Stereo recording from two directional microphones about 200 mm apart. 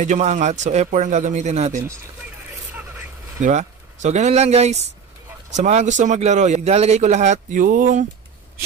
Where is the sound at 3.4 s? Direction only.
35° right (ahead or behind).